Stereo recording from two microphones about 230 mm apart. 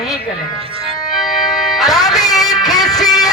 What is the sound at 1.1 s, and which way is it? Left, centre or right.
Organ, centre.